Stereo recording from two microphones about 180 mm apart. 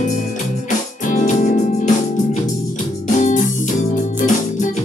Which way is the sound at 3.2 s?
40° left (ahead or behind).